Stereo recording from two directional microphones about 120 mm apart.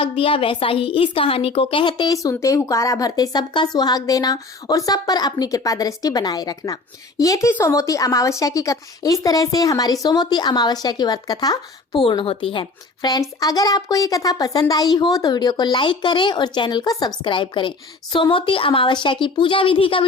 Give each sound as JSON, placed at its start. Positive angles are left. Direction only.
{"t": 0.0, "sound": "a woman's voice", "side_deg": 50}
{"t": 12.0, "sound": "a woman's voice", "side_deg": 45}